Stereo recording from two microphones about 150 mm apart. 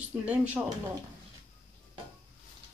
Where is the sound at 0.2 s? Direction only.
10° right (ahead or behind).